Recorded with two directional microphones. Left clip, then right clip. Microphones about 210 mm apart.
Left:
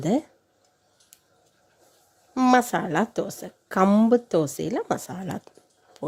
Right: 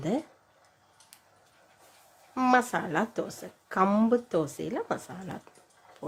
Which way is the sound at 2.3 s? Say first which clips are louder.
Left 4 dB; 35° left (ahead or behind).